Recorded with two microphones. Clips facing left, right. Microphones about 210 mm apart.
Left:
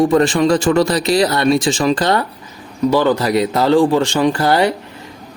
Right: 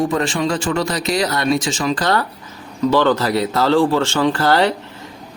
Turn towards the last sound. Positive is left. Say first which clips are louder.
# left 1 dB
turn(degrees=15)  # may be behind; listen again after turning